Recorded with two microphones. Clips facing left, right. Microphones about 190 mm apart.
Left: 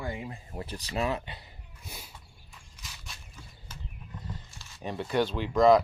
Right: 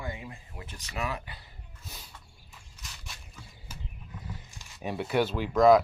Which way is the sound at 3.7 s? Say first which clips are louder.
Right 1 dB; 10° right (ahead or behind).